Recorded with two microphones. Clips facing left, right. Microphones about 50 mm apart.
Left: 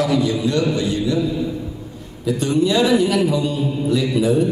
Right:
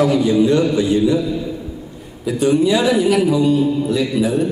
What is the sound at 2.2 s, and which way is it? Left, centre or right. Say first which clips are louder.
A man's voice: right 3 dB; centre.